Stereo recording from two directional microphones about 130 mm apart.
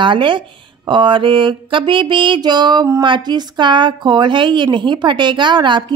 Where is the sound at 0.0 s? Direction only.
40° right (ahead or behind).